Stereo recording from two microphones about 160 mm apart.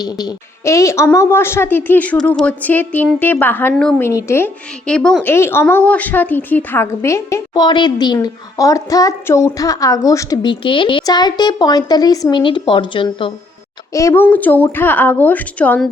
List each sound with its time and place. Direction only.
0.0 s a woman's voice: 25° left (ahead or behind); by 5.3 s 5° left (ahead or behind)
5.3 s a woman's voice: 15° left (ahead or behind); by 13.3 s 30° left (ahead or behind)
13.9 s a woman's voice: 20° left (ahead or behind)